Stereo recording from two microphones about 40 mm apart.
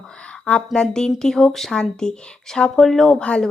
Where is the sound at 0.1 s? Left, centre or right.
Left.